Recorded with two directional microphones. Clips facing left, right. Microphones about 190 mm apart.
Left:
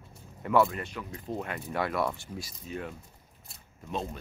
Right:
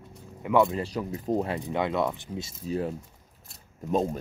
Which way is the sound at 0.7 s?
30° right (ahead or behind).